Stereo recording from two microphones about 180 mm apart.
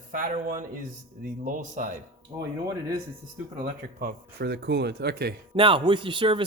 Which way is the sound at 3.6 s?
55° right (ahead or behind).